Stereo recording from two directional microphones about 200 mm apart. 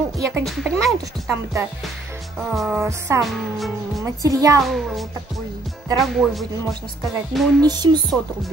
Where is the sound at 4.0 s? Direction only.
15° right (ahead or behind).